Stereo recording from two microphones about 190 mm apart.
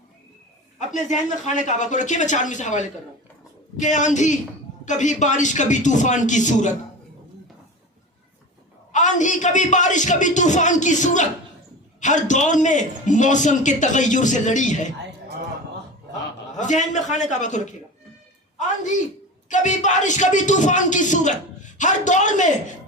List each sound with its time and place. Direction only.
0.9 s speech: 40° left (ahead or behind)
8.9 s speech: 40° left (ahead or behind)
16.6 s speech: 40° left (ahead or behind)
19.5 s speech: 40° left (ahead or behind)